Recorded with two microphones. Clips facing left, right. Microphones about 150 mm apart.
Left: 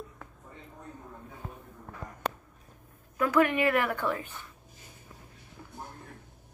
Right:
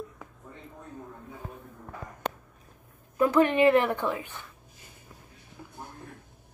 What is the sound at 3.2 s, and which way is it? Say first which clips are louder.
A woman's voice: right 3 dB; 25° right (ahead or behind).